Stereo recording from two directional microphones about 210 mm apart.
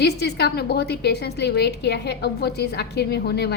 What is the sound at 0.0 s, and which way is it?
A woman's voice, 50° left (ahead or behind).